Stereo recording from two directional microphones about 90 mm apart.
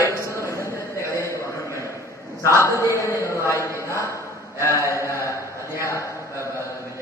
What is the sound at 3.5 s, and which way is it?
Mantra, 35° left (ahead or behind).